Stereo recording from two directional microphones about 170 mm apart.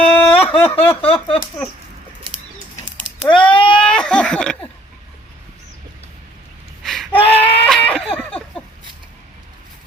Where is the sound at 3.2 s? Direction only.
30° left (ahead or behind).